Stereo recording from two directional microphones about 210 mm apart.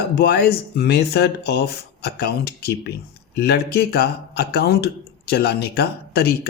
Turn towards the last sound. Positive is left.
turn(degrees=50)  # may be behind; listen again after turning